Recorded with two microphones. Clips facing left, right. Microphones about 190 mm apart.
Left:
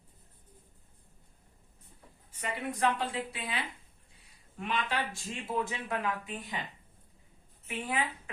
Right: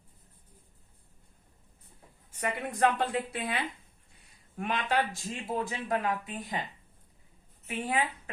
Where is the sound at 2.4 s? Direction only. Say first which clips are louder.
Right 4 dB; 55° right (ahead or behind).